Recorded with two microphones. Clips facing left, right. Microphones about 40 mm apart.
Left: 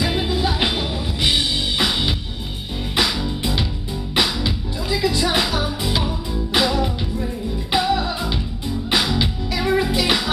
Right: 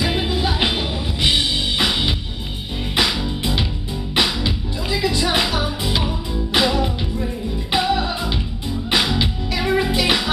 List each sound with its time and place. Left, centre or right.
0.0 s music: centre
7.8 s music: right